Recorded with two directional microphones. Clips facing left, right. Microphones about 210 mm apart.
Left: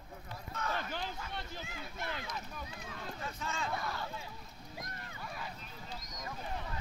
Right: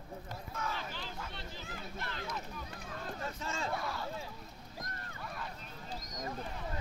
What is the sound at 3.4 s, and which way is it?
Speech, 25° right (ahead or behind).